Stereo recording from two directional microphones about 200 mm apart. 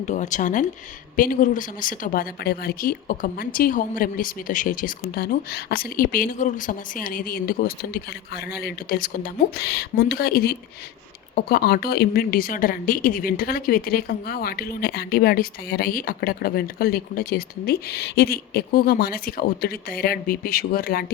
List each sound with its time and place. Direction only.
0.0 s a woman's voice: 35° left (ahead or behind)